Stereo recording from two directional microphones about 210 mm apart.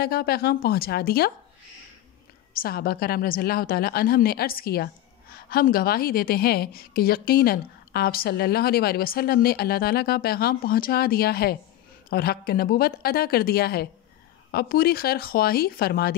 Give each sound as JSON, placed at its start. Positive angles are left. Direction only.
{"t": 0.0, "sound": "a woman's voice", "side_deg": 45}
{"t": 2.6, "sound": "a woman's voice", "side_deg": 45}